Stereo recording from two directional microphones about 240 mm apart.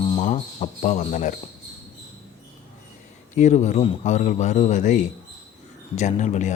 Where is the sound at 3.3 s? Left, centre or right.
Left.